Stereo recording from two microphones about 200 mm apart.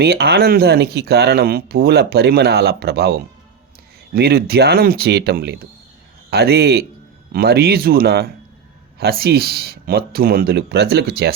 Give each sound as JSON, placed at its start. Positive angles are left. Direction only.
{"t": 0.0, "sound": "speech", "side_deg": -55}